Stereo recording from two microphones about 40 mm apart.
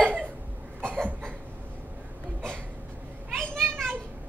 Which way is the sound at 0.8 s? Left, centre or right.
Right.